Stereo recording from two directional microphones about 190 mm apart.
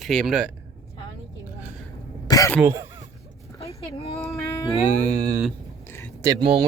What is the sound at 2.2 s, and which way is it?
Throat clearing, 15° left (ahead or behind).